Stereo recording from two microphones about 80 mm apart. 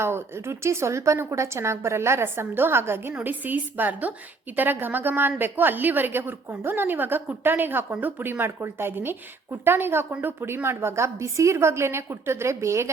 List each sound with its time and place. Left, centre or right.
0.0 s a woman's voice: right